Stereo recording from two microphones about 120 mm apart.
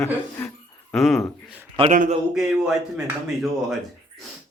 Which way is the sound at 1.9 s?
90° right.